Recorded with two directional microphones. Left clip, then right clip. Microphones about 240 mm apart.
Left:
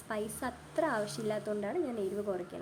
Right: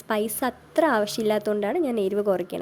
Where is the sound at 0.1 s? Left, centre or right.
Right.